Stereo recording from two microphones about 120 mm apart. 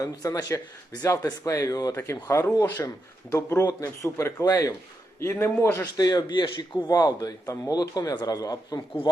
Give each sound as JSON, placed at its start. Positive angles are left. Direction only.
{"t": 0.0, "sound": "speech", "side_deg": 30}
{"t": 5.8, "sound": "speech", "side_deg": 35}